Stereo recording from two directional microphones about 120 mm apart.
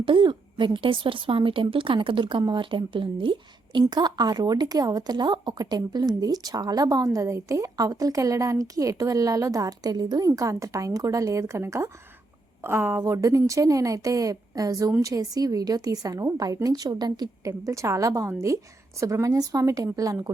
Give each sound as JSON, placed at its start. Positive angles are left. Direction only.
{"t": 0.0, "sound": "a woman's voice", "side_deg": -45}